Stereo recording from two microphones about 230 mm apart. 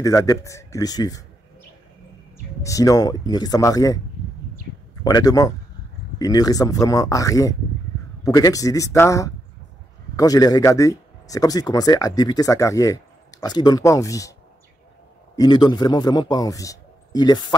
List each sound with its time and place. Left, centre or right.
0.0 s speech: centre
2.6 s speech: centre
5.0 s speech: centre
15.3 s speech: centre